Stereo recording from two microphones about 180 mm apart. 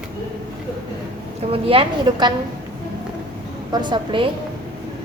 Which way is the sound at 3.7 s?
25° right (ahead or behind).